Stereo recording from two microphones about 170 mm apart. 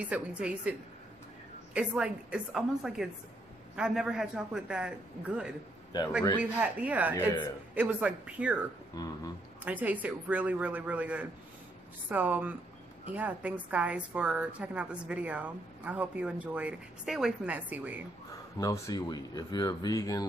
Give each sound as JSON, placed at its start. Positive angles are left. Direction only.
{"t": 0.0, "sound": "a woman's voice", "side_deg": -5}
{"t": 6.6, "sound": "a woman's voice", "side_deg": -10}
{"t": 8.9, "sound": "speech", "side_deg": 20}
{"t": 9.7, "sound": "a woman's voice", "side_deg": -10}
{"t": 18.6, "sound": "speech", "side_deg": 20}